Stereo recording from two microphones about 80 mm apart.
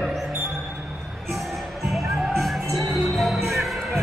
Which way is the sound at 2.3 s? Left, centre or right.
Centre.